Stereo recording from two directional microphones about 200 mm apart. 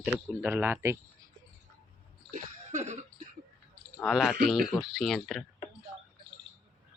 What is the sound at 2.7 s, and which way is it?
Cough, 35° right (ahead or behind).